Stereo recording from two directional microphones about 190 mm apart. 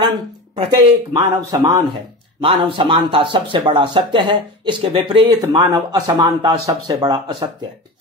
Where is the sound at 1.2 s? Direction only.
10° right (ahead or behind).